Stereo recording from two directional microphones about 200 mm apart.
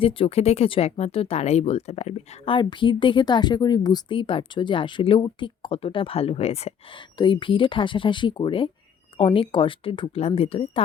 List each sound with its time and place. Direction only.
0.0 s speech: 25° left (ahead or behind)